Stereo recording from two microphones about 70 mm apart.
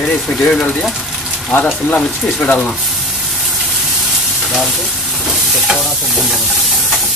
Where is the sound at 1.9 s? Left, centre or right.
Centre.